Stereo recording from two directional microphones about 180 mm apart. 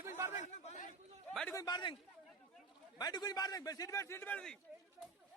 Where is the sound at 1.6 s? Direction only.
25° left (ahead or behind).